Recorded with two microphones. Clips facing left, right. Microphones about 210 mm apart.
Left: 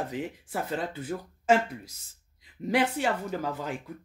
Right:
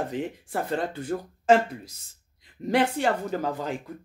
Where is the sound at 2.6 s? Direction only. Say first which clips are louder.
Right 3 dB; 5° left (ahead or behind).